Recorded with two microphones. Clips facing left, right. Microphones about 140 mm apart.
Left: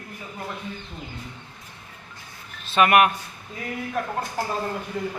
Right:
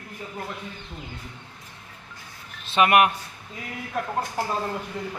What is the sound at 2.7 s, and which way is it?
Speech, 15° right (ahead or behind).